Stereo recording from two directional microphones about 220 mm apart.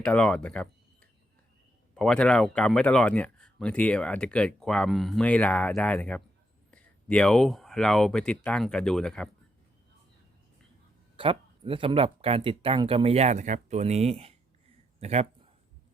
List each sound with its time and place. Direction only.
0.0 s speech: 5° left (ahead or behind)
2.0 s speech: 5° left (ahead or behind)
11.2 s speech: 25° right (ahead or behind)